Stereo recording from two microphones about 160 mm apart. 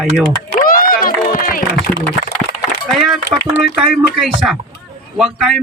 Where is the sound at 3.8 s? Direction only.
Centre (ahead or behind).